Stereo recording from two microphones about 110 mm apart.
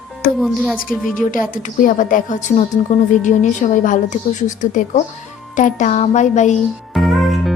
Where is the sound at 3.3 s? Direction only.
90° left.